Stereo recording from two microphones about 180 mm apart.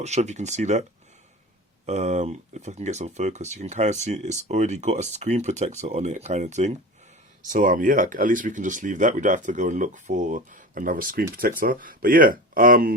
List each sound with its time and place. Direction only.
0.0 s speech: 40° right (ahead or behind)
1.9 s speech: 40° right (ahead or behind)